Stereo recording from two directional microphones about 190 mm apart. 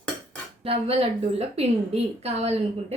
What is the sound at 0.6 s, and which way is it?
A woman's voice, 30° right (ahead or behind).